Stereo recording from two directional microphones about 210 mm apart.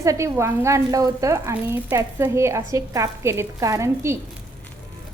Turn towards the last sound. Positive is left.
turn(degrees=-15)  # may be behind; listen again after turning